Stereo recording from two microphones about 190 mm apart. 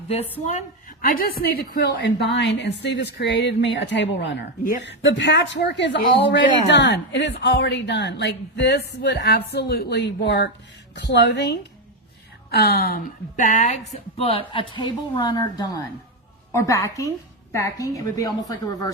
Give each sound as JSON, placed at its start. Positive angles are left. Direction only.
{"t": 1.0, "sound": "a woman's voice", "side_deg": 50}